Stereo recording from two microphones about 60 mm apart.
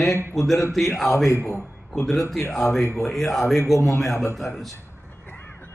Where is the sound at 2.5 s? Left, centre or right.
Centre.